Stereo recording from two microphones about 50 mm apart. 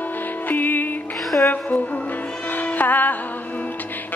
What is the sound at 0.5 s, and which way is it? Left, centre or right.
Music, left.